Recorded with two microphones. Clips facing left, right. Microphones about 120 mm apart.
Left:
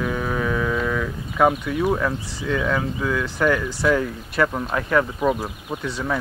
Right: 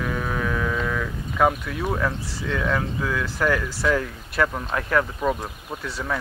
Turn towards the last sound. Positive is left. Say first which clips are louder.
# left 3 dB
turn(degrees=0)  # may be behind; listen again after turning